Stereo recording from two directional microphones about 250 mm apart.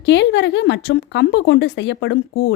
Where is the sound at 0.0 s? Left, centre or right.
Left.